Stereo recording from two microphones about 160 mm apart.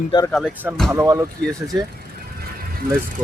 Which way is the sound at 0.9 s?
15° right (ahead or behind).